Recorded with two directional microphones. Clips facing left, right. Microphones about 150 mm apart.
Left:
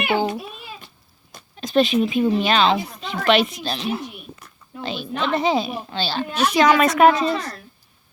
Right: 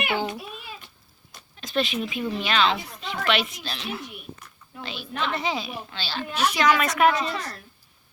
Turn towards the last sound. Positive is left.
turn(degrees=30)  # may be behind; listen again after turning